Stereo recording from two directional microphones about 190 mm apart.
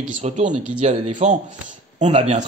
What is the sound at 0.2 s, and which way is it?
Speech, 35° right (ahead or behind).